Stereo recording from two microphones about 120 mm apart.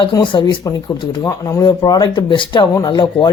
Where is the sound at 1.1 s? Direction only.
30° left (ahead or behind).